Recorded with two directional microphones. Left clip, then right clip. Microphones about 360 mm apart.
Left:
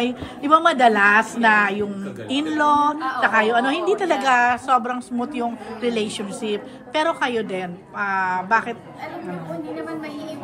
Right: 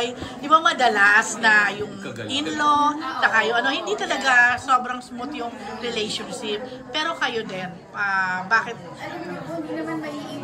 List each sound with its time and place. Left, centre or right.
0.0 s a woman's voice: left